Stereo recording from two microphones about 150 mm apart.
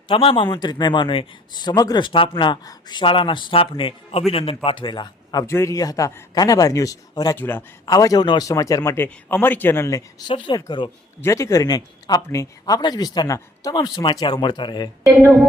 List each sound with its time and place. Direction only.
0.1 s a man's voice: 35° left (ahead or behind)
7.3 s speech: 15° left (ahead or behind)
7.9 s speech: 25° left (ahead or behind)
11.2 s speech: 20° left (ahead or behind)